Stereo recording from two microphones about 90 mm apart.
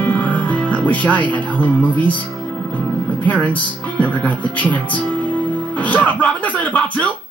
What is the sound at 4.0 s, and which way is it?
Speech, 15° left (ahead or behind).